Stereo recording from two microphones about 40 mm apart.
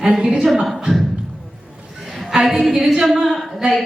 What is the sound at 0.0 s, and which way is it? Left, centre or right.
Speech, right.